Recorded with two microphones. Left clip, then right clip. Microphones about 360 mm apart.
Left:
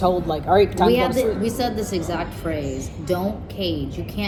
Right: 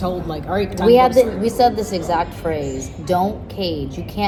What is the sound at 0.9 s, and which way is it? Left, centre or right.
A woman's voice, centre.